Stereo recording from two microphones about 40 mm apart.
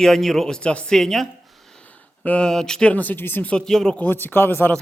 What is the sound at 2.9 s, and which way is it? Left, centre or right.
Speech, left.